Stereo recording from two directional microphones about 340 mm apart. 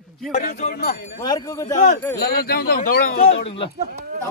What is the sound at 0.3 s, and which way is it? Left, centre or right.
Speech, left.